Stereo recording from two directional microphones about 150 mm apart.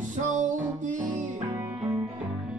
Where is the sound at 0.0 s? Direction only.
55° right (ahead or behind).